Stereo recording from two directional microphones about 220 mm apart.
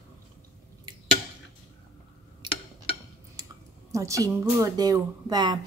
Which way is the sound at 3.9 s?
15° right (ahead or behind).